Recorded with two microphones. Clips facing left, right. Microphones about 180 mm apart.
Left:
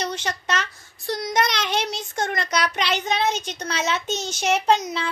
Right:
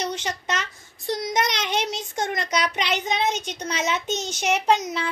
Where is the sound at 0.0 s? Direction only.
15° right (ahead or behind).